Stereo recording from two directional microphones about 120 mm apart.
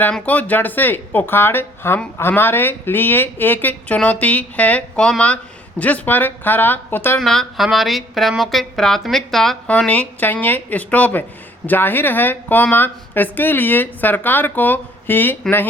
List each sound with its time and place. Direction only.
0.0 s speech: 10° left (ahead or behind)
7.2 s speech: 5° left (ahead or behind)